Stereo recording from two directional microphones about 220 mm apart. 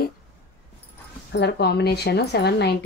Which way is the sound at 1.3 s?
50° left (ahead or behind).